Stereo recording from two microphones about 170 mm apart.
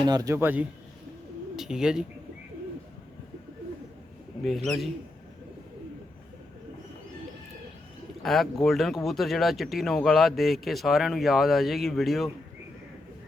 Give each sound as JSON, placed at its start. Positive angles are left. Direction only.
{"t": 0.0, "sound": "a man's voice", "side_deg": -20}
{"t": 4.4, "sound": "speech", "side_deg": 0}
{"t": 8.2, "sound": "speech", "side_deg": 0}